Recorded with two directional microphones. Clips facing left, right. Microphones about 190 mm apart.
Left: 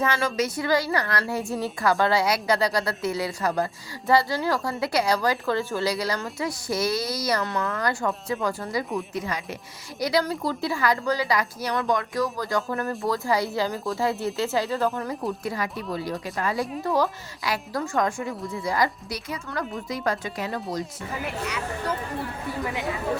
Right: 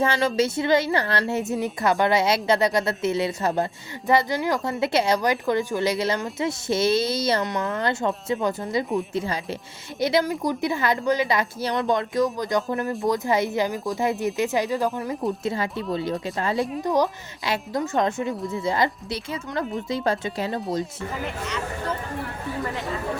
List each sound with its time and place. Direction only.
0.0 s a woman's voice: 30° right (ahead or behind)
15.4 s a woman's voice: 25° right (ahead or behind)